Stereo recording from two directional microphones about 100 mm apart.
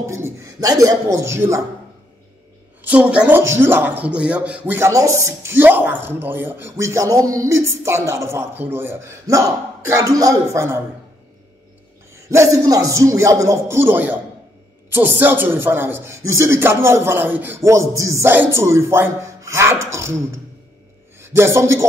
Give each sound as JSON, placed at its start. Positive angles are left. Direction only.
{"t": 0.0, "sound": "speech", "side_deg": -30}
{"t": 2.8, "sound": "speech", "side_deg": -15}
{"t": 4.7, "sound": "speech", "side_deg": -30}
{"t": 12.1, "sound": "speech", "side_deg": -30}
{"t": 21.2, "sound": "a man's voice", "side_deg": -25}